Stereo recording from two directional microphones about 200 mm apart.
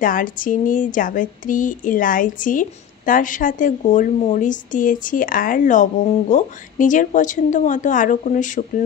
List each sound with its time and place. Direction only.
0.0 s a woman's voice: 45° left (ahead or behind)